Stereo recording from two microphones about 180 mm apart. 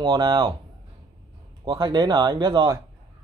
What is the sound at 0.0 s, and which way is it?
Speech, 25° right (ahead or behind).